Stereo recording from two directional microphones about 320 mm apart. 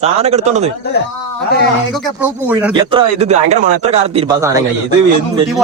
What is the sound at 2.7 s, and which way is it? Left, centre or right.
Speech, centre.